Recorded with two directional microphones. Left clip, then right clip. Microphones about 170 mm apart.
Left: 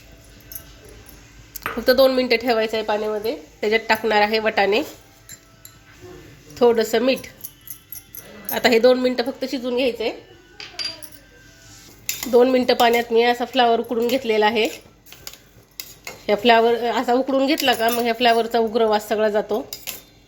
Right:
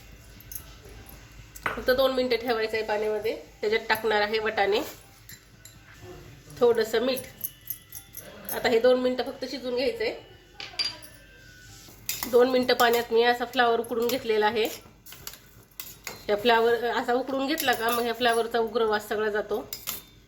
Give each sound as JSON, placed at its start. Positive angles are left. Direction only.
{"t": 1.8, "sound": "a woman's voice", "side_deg": 45}
{"t": 6.6, "sound": "a woman's voice", "side_deg": 45}
{"t": 8.5, "sound": "a woman's voice", "side_deg": 50}
{"t": 12.3, "sound": "a woman's voice", "side_deg": 25}
{"t": 16.2, "sound": "a woman's voice", "side_deg": 30}